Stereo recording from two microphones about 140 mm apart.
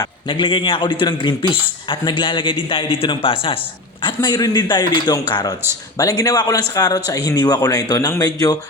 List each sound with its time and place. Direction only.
0.0 s a man's voice: 35° left (ahead or behind)